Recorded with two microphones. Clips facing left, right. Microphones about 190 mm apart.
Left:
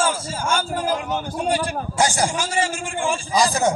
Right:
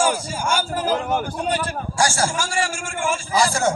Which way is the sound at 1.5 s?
15° left (ahead or behind).